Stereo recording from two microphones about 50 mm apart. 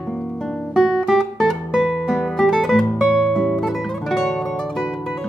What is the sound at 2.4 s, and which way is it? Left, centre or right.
Music, centre.